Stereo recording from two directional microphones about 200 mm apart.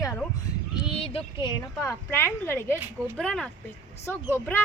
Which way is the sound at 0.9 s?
30° left (ahead or behind).